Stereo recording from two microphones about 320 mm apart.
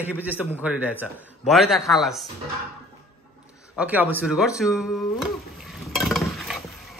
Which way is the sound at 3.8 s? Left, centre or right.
Centre.